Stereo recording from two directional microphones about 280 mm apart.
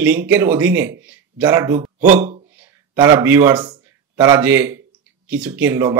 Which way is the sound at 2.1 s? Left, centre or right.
Right.